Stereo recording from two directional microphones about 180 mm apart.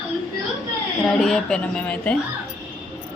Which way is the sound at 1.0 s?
5° left (ahead or behind).